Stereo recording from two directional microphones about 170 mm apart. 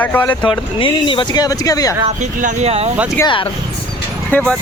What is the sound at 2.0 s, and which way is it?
Speech, 45° right (ahead or behind).